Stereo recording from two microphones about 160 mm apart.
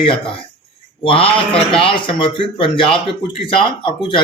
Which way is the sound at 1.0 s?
35° left (ahead or behind).